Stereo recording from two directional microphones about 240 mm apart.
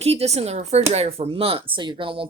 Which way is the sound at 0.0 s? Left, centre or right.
Right.